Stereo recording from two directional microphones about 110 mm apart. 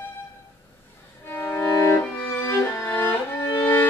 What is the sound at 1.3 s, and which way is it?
Music, 20° left (ahead or behind).